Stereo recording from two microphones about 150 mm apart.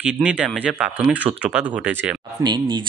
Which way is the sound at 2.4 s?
30° right (ahead or behind).